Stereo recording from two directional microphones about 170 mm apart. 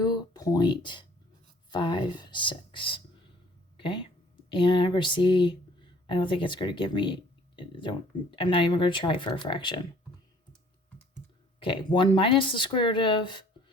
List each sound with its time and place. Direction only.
0.0 s speech: 25° left (ahead or behind)
11.6 s speech: 30° left (ahead or behind)